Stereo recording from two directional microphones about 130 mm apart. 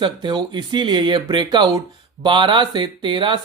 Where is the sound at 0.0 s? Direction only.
35° right (ahead or behind).